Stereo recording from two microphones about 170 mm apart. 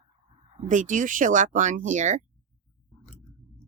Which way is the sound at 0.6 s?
50° right (ahead or behind).